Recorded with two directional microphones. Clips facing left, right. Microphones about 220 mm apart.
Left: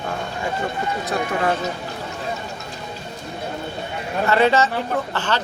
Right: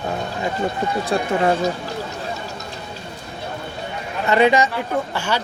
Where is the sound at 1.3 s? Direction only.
25° right (ahead or behind).